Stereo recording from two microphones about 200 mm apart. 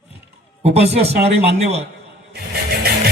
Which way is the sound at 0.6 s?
30° right (ahead or behind).